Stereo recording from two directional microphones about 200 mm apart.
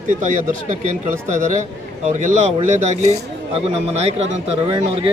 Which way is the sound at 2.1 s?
35° right (ahead or behind).